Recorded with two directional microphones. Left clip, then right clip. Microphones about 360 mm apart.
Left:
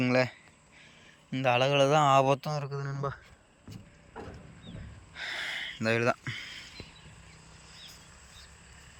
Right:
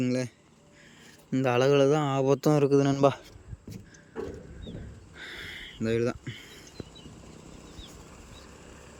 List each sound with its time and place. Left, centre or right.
0.0 s speech: centre
2.4 s a man's voice: right
5.1 s a sound: centre